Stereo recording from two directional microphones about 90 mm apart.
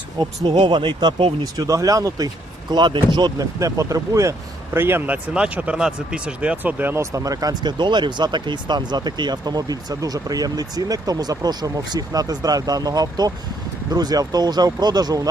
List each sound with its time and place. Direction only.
0.2 s speech: 65° right (ahead or behind)
1.5 s speech: 40° right (ahead or behind); by 7.0 s 20° right (ahead or behind)
7.0 s speech: 40° right (ahead or behind)